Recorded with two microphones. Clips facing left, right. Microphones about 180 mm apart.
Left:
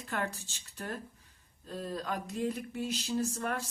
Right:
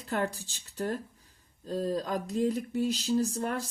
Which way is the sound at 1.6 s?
35° right (ahead or behind).